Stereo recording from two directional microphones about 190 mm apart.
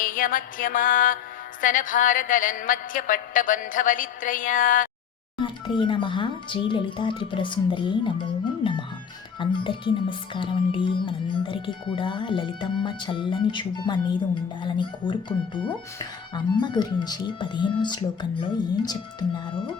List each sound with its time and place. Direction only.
0.0 s a woman's voice: 45° left (ahead or behind)
5.4 s speech: 25° left (ahead or behind)
9.4 s music: 25° left (ahead or behind)
14.6 s speech: 25° left (ahead or behind)